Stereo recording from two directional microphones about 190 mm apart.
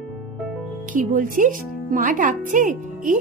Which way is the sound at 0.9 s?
45° right (ahead or behind).